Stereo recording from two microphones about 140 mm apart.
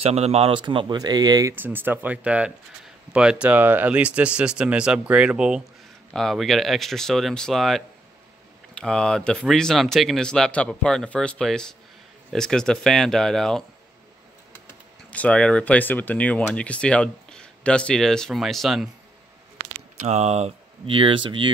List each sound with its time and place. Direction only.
0.0 s speech: 45° right (ahead or behind); by 1.5 s 30° right (ahead or behind)
1.5 s speech: 15° right (ahead or behind); by 13.7 s 5° left (ahead or behind)
15.0 s speech: 10° left (ahead or behind)
20.0 s speech: 50° right (ahead or behind); by 21.5 s 35° right (ahead or behind)